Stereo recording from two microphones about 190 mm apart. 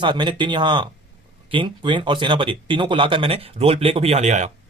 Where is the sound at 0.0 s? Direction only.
25° right (ahead or behind).